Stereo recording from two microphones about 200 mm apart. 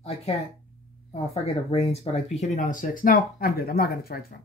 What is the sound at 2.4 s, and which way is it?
Speech, 40° left (ahead or behind).